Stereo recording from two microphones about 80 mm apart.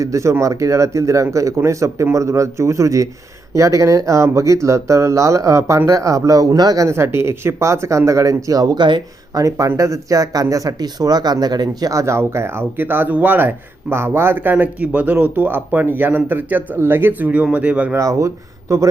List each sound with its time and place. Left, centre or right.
0.0 s speech: right
6.8 s speech: right
9.4 s speech: right; by 17.9 s centre
17.9 s speech: right